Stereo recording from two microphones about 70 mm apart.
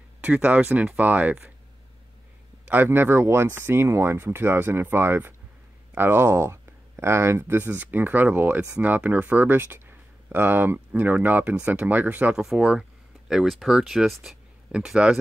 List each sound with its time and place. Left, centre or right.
0.2 s speech: right
2.7 s speech: right
12.4 s speech: centre
14.7 s speech: centre